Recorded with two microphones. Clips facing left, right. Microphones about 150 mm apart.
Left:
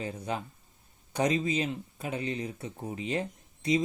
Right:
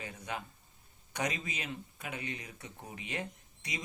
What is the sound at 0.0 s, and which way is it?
Speech, 30° left (ahead or behind).